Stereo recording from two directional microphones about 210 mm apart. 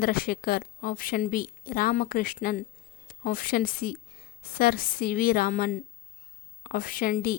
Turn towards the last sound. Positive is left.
turn(degrees=40)  # may be behind; listen again after turning